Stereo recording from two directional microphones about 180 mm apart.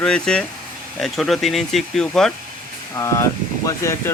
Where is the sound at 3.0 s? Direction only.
15° left (ahead or behind).